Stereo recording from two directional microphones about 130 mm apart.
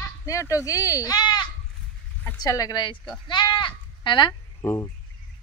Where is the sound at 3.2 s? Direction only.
35° left (ahead or behind).